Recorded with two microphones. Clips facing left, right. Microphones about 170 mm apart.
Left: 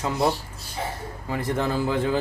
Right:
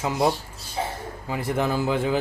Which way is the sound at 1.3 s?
15° right (ahead or behind).